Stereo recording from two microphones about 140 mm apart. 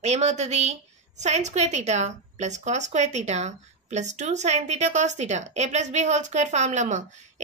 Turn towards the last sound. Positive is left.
turn(degrees=-60)  # may be behind; listen again after turning